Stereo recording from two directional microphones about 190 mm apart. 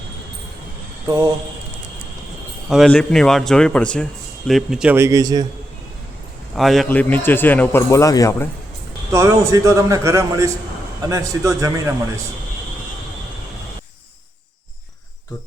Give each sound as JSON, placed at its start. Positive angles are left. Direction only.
{"t": 1.0, "sound": "a man's voice", "side_deg": -15}
{"t": 2.6, "sound": "a man's voice", "side_deg": 0}
{"t": 6.6, "sound": "a man's voice", "side_deg": 0}
{"t": 9.1, "sound": "a man's voice", "side_deg": -15}